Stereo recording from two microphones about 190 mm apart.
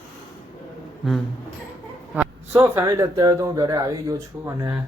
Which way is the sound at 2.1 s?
10° right (ahead or behind).